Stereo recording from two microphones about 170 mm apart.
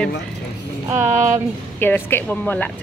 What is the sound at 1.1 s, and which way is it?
Speech, 45° right (ahead or behind).